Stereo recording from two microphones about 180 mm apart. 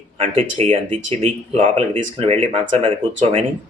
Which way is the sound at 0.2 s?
35° right (ahead or behind).